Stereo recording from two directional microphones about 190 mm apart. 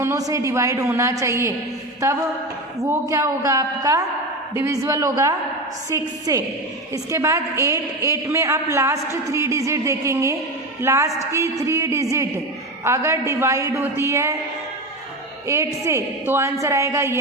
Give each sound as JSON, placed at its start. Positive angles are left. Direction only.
{"t": 0.0, "sound": "a woman's voice", "side_deg": -15}
{"t": 2.9, "sound": "a woman's voice", "side_deg": -15}
{"t": 15.4, "sound": "a woman's voice", "side_deg": -15}